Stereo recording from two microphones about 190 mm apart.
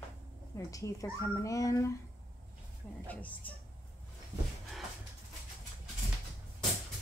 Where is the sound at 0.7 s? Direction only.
15° left (ahead or behind).